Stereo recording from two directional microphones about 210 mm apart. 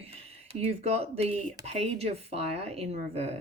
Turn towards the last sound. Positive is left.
turn(degrees=-30)  # may be behind; listen again after turning